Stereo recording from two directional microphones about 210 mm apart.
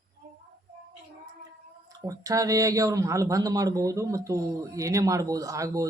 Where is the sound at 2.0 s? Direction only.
15° right (ahead or behind).